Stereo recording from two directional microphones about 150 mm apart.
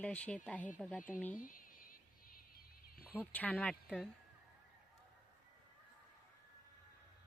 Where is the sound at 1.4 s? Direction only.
65° left (ahead or behind).